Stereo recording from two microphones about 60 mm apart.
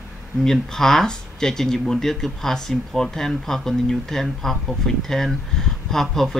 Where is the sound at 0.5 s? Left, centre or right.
Centre.